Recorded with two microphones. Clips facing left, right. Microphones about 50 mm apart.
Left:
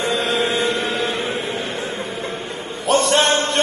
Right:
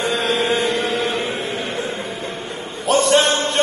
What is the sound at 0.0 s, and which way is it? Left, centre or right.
Chant, right.